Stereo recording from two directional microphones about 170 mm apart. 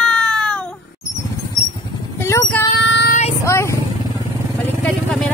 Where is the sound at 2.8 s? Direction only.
90° left.